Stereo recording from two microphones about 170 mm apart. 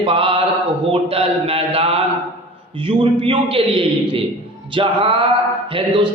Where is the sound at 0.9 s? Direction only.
35° right (ahead or behind).